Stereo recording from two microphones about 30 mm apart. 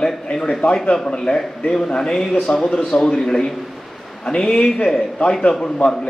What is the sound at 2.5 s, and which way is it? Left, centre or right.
Speech, left.